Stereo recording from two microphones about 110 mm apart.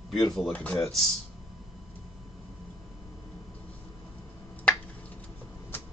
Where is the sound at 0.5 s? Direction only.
15° left (ahead or behind).